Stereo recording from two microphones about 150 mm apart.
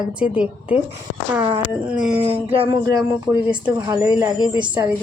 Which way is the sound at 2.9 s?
20° right (ahead or behind).